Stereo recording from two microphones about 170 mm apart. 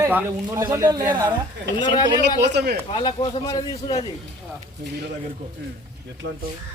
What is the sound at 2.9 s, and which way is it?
Speech, 25° left (ahead or behind).